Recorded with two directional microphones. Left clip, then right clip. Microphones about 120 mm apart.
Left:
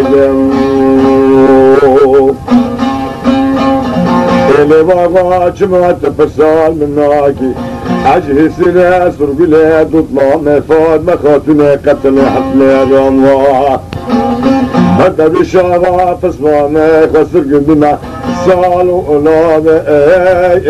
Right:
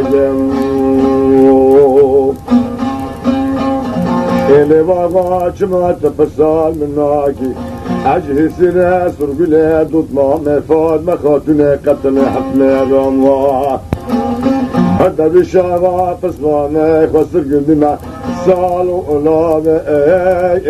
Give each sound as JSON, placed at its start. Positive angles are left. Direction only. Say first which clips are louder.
{"t": 0.0, "sound": "music", "louder": "left 4 dB", "side_deg": -40}
{"t": 7.9, "sound": "speech", "louder": "left 5 dB", "side_deg": -40}
{"t": 18.4, "sound": "speech", "louder": "left 4 dB", "side_deg": -40}